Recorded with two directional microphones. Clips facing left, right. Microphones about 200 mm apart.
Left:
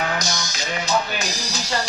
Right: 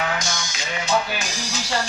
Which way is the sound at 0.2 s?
40° left (ahead or behind).